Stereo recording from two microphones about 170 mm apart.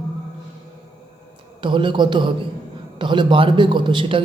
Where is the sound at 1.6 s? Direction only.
30° right (ahead or behind).